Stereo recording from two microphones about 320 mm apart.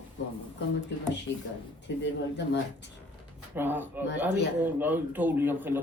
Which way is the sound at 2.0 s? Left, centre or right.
Left.